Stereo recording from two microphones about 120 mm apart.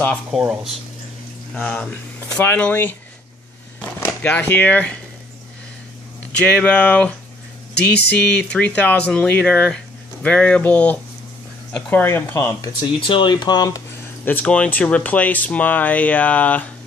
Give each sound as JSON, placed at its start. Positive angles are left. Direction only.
{"t": 0.3, "sound": "speech", "side_deg": -5}
{"t": 1.5, "sound": "speech", "side_deg": 10}
{"t": 4.0, "sound": "speech", "side_deg": 15}
{"t": 6.4, "sound": "speech", "side_deg": 10}
{"t": 13.0, "sound": "speech", "side_deg": 45}
{"t": 14.2, "sound": "speech", "side_deg": 15}